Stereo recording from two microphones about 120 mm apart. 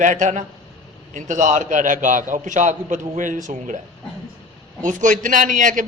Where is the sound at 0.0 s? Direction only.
90° right.